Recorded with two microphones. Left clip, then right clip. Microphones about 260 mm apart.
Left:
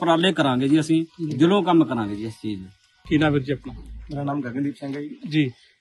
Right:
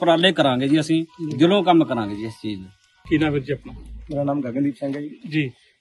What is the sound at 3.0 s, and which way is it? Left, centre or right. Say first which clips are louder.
Speech: even; left.